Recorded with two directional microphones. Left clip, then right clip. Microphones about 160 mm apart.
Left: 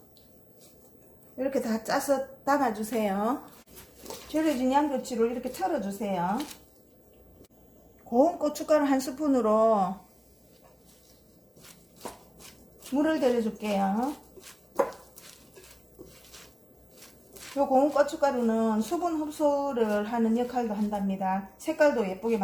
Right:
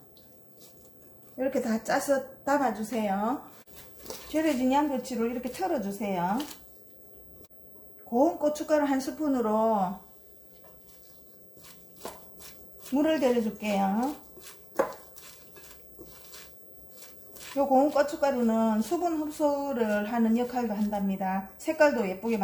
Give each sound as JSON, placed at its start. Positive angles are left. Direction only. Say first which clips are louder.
{"t": 1.4, "sound": "a woman's voice", "louder": "even", "side_deg": 25}
{"t": 4.3, "sound": "speech", "louder": "even", "side_deg": 15}
{"t": 8.1, "sound": "speech", "louder": "left 1 dB", "side_deg": 40}
{"t": 13.0, "sound": "speech", "louder": "even", "side_deg": 10}
{"t": 17.6, "sound": "speech", "louder": "even", "side_deg": 10}